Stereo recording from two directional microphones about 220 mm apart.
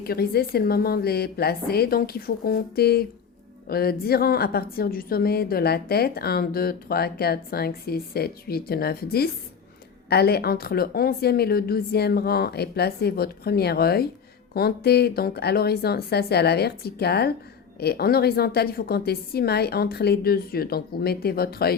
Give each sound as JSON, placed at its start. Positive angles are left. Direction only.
{"t": 0.0, "sound": "a woman's voice", "side_deg": 45}